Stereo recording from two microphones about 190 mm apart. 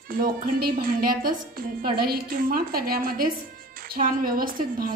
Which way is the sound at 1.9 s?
50° right (ahead or behind).